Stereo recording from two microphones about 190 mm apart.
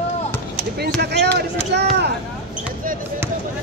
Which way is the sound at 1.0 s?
60° right (ahead or behind).